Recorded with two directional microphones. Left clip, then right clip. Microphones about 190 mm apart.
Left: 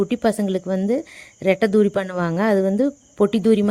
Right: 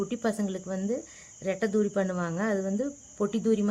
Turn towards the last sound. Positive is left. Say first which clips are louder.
# left 10 dB
turn(degrees=45)  # may be behind; listen again after turning